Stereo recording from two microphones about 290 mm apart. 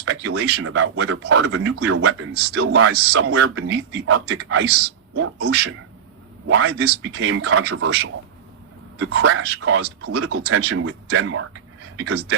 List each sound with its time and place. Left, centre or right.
0.0 s a sound: right
0.6 s speech: right
4.6 s a man's voice: right